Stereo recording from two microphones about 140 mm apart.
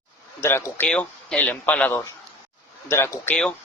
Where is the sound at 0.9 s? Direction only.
5° left (ahead or behind).